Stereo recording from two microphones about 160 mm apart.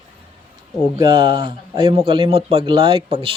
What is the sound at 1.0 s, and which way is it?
A man's voice, 25° right (ahead or behind).